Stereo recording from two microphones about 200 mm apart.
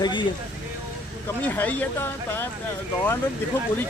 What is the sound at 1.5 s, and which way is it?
Speech, 10° left (ahead or behind).